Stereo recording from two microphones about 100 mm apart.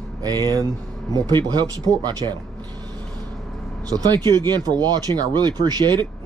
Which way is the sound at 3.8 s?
40° right (ahead or behind).